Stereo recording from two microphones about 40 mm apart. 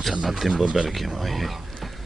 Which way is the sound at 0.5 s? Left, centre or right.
Centre.